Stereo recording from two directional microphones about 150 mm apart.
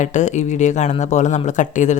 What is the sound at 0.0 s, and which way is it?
Speech, 55° left (ahead or behind).